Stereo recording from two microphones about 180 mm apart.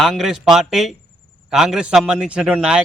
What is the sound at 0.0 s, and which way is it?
A man's voice, centre (ahead or behind).